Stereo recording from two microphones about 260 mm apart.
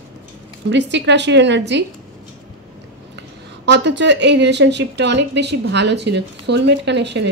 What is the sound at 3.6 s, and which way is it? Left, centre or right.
Speech, right.